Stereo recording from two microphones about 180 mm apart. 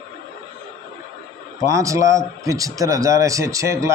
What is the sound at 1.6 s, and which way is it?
Speech, 15° right (ahead or behind).